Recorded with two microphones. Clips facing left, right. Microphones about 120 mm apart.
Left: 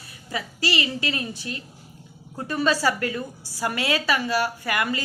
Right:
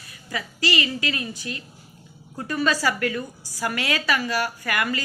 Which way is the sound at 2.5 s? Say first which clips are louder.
Left 1 dB; 25° left (ahead or behind).